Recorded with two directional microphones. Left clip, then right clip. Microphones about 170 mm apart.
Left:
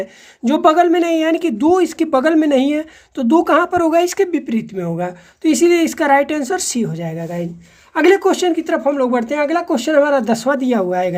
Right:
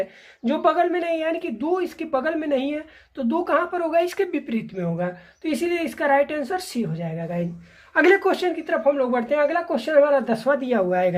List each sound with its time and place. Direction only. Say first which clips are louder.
0.4 s speech: left 8 dB; 40° left (ahead or behind)